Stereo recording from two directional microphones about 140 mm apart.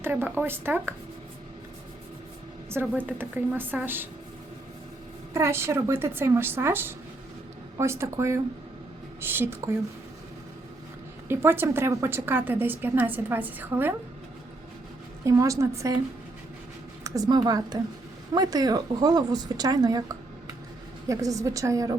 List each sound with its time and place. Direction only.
0.0 s a woman's voice: 15° right (ahead or behind)
2.8 s a woman's voice: 10° right (ahead or behind)
5.3 s a woman's voice: 20° right (ahead or behind)
11.3 s a woman's voice: 15° right (ahead or behind)
15.2 s a woman's voice: 25° right (ahead or behind)
17.0 s a woman's voice: 30° right (ahead or behind)
21.1 s a woman's voice: 25° right (ahead or behind)